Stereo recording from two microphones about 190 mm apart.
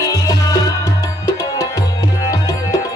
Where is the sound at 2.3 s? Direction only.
20° left (ahead or behind).